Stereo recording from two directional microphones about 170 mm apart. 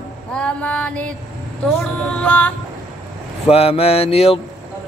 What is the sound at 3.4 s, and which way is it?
Vehicle, 35° left (ahead or behind).